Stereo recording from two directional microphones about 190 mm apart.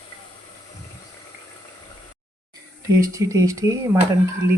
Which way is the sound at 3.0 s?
15° right (ahead or behind).